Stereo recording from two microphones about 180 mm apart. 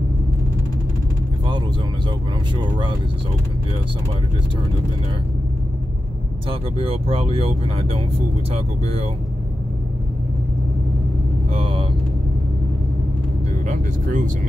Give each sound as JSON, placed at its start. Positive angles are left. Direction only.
{"t": 2.5, "sound": "speech", "side_deg": -25}
{"t": 6.5, "sound": "speech", "side_deg": -30}
{"t": 11.5, "sound": "vehicle", "side_deg": -30}
{"t": 13.7, "sound": "speech", "side_deg": -45}